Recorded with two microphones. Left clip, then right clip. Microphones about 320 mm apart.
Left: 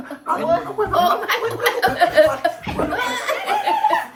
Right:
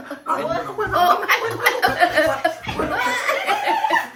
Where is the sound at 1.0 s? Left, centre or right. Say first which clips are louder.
Right 3 dB; centre.